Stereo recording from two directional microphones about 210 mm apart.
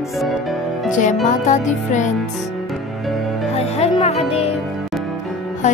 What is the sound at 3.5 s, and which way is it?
Music, 30° left (ahead or behind).